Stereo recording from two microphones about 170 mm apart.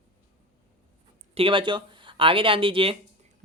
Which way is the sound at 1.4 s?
30° right (ahead or behind).